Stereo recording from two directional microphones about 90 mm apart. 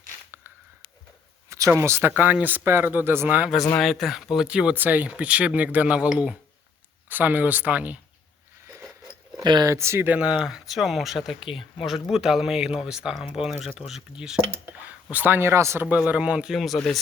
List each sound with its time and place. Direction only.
1.5 s a sound: 35° right (ahead or behind)
1.8 s speech: 30° right (ahead or behind)
3.8 s speech: centre (ahead or behind); by 7.9 s 15° right (ahead or behind)
8.6 s a sound: 30° right (ahead or behind)
9.4 s speech: 50° right (ahead or behind)
9.6 s speech: 30° right (ahead or behind)
10.1 s speech: 10° right (ahead or behind); by 15.9 s 30° right (ahead or behind)
15.9 s speech: 15° right (ahead or behind)
16.6 s speech: 5° left (ahead or behind)